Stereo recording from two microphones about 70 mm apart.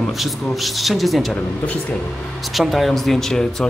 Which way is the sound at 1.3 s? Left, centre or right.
Left.